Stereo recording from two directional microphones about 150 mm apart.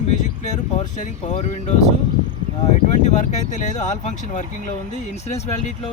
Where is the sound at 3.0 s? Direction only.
50° left (ahead or behind).